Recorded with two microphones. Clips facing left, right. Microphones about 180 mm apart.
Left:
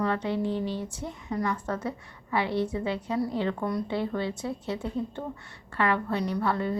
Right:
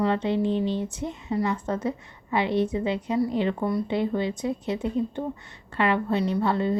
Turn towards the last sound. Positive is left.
turn(degrees=-25)  # may be behind; listen again after turning